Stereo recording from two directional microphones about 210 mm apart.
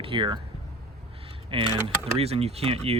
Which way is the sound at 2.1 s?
30° right (ahead or behind).